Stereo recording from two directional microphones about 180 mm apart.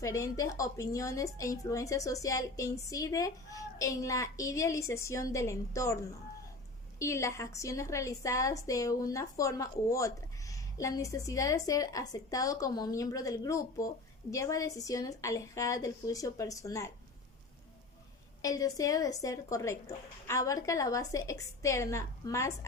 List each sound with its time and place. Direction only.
0.0 s a woman's voice: 20° left (ahead or behind)
7.0 s a woman's voice: 15° left (ahead or behind)
18.4 s a woman's voice: 20° left (ahead or behind)